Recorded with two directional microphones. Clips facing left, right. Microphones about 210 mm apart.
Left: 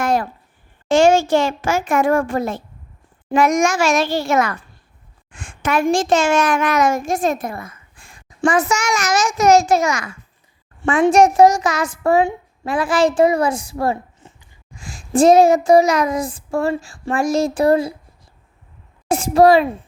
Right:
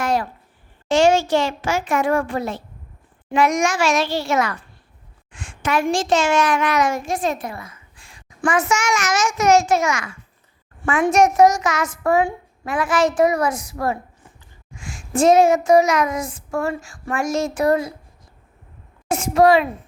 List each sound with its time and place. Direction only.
0.0 s a sound: 50° left (ahead or behind)
0.9 s a child's voice: 50° left (ahead or behind)
8.4 s a child's voice: 35° left (ahead or behind)
14.7 s a child's voice: 35° left (ahead or behind)
19.0 s a child's voice: 35° left (ahead or behind)